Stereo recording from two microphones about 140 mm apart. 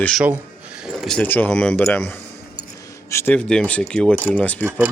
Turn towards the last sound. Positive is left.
turn(degrees=10)  # may be behind; listen again after turning